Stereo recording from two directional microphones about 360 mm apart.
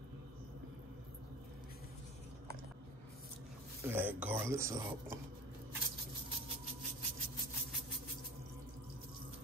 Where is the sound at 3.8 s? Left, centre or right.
Centre.